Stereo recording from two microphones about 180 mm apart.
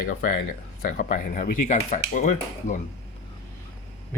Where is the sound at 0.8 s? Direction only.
50° left (ahead or behind).